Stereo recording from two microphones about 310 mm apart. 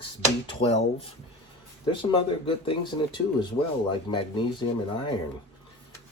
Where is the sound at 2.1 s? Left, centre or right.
Centre.